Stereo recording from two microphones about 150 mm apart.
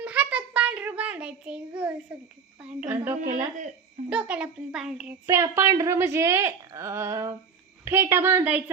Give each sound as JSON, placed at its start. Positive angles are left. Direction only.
{"t": 0.0, "sound": "child singing", "side_deg": -10}
{"t": 2.8, "sound": "a child's voice", "side_deg": -15}
{"t": 5.3, "sound": "a woman's voice", "side_deg": -15}